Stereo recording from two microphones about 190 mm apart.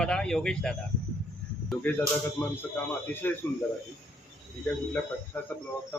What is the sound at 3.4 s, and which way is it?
Speech, 10° left (ahead or behind).